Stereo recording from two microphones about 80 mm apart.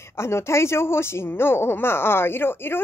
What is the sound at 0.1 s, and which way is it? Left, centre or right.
Speech, left.